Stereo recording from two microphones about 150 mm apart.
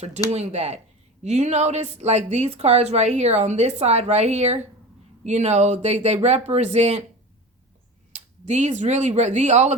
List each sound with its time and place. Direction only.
0.3 s a woman's voice: 45° right (ahead or behind)
8.1 s speech: 50° right (ahead or behind)